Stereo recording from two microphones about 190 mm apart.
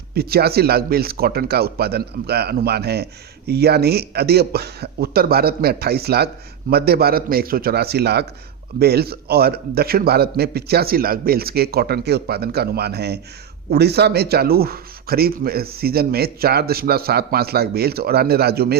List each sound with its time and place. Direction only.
0.1 s speech: 55° right (ahead or behind)